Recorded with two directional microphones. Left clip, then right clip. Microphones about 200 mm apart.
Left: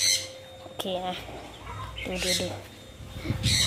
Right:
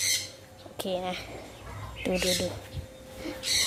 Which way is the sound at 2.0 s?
30° right (ahead or behind).